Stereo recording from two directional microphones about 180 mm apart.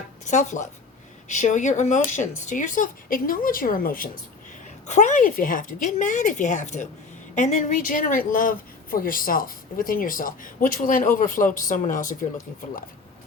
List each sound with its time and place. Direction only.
0.3 s a woman's voice: 40° left (ahead or behind)